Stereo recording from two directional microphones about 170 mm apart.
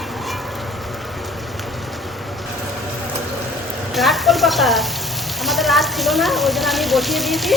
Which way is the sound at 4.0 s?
Centre (ahead or behind).